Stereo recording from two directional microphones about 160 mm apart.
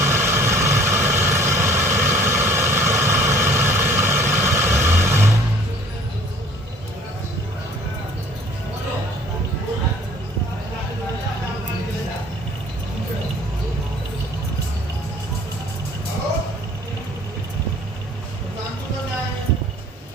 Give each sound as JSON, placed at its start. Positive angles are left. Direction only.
{"t": 0.0, "sound": "vehicle", "side_deg": -15}